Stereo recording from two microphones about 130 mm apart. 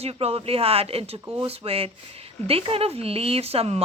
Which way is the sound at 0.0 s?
50° right (ahead or behind).